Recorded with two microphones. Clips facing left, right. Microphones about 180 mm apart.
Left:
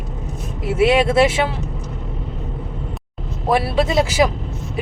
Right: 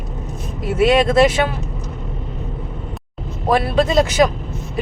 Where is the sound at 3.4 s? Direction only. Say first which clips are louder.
Right 1 dB; 5° left (ahead or behind).